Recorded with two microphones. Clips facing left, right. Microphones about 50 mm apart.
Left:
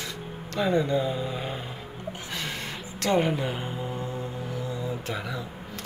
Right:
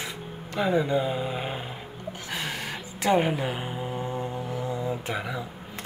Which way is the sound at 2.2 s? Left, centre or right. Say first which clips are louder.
Right 3 dB; centre.